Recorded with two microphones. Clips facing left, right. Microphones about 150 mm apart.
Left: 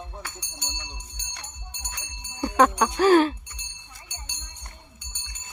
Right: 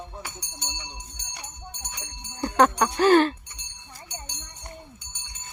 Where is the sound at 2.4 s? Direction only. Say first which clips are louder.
Even; 5° left (ahead or behind).